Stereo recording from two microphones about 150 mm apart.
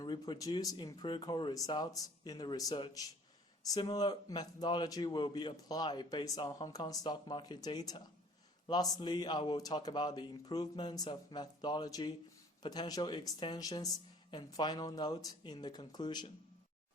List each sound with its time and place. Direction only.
0.0 s speech: 25° left (ahead or behind)